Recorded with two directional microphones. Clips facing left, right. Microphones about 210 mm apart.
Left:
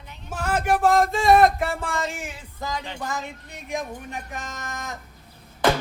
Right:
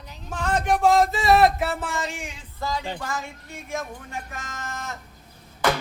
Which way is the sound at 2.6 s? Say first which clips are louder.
Right 2 dB; 20° left (ahead or behind).